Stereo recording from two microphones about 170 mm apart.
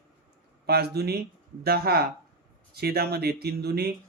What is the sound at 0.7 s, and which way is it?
Speech, 70° right (ahead or behind).